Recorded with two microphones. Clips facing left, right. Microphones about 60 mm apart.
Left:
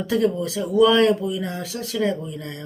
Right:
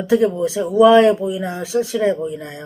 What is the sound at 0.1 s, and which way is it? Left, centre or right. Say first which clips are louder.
Speech: right 6 dB; centre.